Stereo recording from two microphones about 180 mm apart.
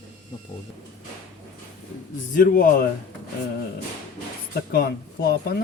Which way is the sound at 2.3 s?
50° left (ahead or behind).